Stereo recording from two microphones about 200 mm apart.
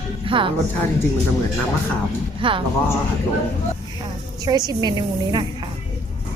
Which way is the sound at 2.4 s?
25° right (ahead or behind).